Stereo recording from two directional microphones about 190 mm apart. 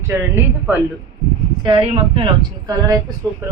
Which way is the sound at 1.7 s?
25° right (ahead or behind).